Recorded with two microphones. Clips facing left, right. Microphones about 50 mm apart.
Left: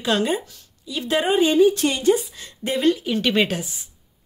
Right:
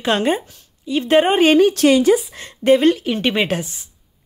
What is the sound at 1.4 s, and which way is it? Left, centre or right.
Speech, right.